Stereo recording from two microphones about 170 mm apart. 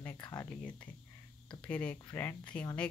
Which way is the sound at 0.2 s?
20° left (ahead or behind).